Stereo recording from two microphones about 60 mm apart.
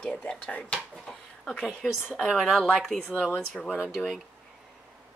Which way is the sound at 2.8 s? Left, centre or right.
Centre.